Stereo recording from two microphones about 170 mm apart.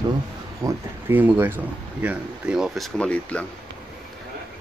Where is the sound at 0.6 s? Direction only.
10° right (ahead or behind); by 3.5 s 5° left (ahead or behind).